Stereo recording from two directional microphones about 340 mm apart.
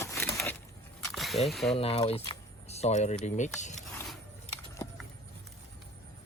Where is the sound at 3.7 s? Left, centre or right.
Centre.